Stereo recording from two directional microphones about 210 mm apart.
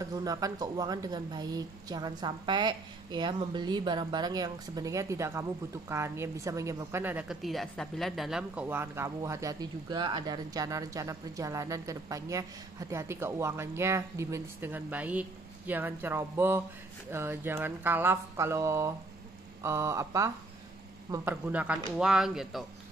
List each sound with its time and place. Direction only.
0.0 s speech: 15° right (ahead or behind); by 22.7 s centre (ahead or behind)